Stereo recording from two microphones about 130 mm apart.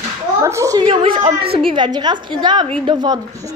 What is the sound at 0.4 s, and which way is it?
Speech, 25° right (ahead or behind).